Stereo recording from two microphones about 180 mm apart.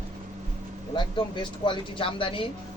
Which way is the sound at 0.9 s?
25° left (ahead or behind).